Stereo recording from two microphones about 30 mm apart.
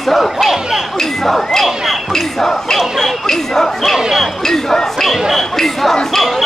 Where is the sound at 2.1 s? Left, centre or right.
Centre.